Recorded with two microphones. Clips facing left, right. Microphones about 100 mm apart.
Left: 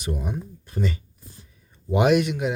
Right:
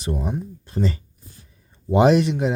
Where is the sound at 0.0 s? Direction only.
30° right (ahead or behind).